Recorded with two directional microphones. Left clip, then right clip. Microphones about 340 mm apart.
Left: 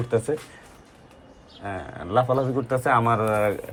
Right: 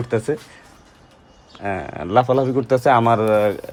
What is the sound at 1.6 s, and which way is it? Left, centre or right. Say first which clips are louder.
A man's voice: right 8 dB; centre.